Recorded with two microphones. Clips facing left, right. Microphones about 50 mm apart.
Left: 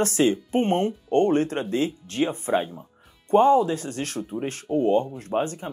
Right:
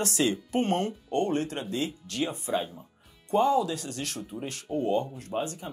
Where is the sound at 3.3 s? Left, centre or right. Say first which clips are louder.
Left 6 dB; left.